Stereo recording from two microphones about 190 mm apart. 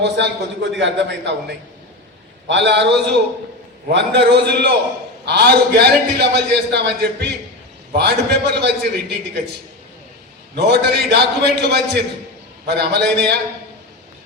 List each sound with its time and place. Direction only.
0.0 s a man's voice: 65° right (ahead or behind)
2.5 s a man's voice: 65° right (ahead or behind)
10.5 s a man's voice: 60° right (ahead or behind)